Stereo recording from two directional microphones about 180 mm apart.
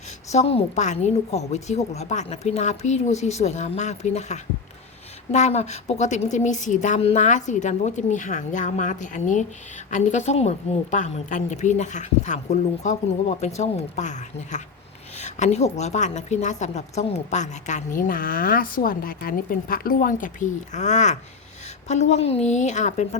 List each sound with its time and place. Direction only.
0.3 s a woman's voice: 35° left (ahead or behind)